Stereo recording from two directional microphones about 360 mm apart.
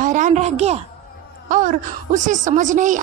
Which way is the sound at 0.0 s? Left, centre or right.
Centre.